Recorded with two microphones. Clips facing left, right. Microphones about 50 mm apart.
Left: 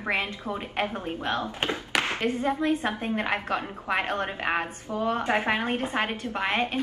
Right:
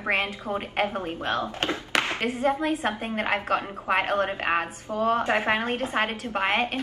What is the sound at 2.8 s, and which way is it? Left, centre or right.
Speech, right.